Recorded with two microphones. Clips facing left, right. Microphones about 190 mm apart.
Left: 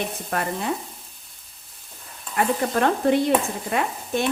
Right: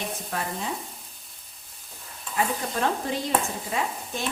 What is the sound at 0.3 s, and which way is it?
Speech, 60° left (ahead or behind).